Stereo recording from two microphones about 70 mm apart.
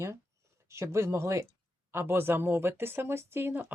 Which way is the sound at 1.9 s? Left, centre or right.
Right.